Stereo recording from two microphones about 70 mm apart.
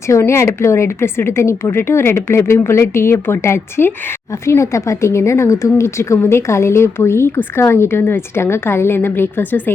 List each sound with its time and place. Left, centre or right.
0.2 s a woman's voice: left